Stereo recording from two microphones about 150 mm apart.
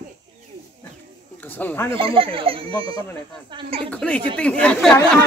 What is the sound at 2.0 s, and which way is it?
Speech, 35° right (ahead or behind).